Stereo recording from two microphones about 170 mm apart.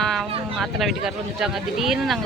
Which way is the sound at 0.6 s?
Centre (ahead or behind).